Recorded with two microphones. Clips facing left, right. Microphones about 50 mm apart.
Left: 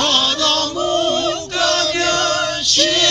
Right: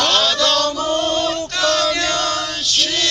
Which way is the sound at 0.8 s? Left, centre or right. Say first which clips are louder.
Left 1 dB; left.